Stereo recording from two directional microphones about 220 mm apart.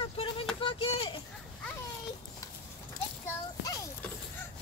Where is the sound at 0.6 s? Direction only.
25° left (ahead or behind).